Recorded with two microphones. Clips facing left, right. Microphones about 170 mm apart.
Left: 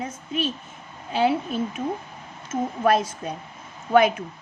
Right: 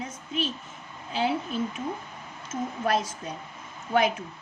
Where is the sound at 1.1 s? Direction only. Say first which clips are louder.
Left 6 dB; 60° left (ahead or behind).